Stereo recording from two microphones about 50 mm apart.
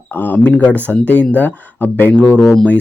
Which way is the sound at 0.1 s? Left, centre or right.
Left.